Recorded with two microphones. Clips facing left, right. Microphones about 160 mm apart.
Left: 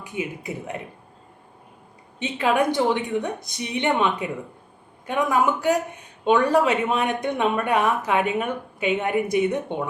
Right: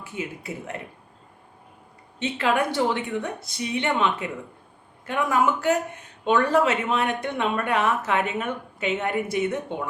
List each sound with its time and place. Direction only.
0.0 s speech: 15° left (ahead or behind)
2.1 s speech: 15° left (ahead or behind)